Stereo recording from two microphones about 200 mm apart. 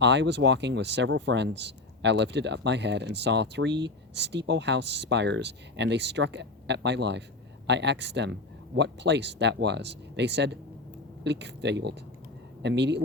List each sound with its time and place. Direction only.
0.0 s speech: 60° right (ahead or behind)